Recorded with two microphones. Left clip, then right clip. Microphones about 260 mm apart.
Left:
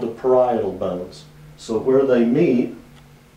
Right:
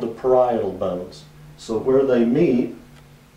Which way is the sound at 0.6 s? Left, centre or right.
Left.